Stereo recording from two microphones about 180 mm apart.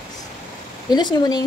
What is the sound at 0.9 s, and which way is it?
Speech, 25° left (ahead or behind).